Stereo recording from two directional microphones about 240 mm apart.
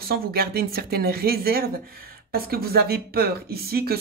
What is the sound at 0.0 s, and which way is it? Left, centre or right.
Speech, right.